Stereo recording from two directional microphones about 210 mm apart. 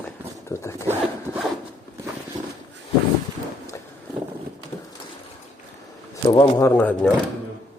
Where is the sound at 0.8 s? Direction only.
10° right (ahead or behind).